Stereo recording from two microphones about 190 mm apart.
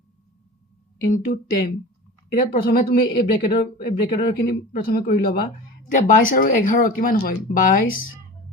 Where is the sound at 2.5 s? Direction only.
50° left (ahead or behind).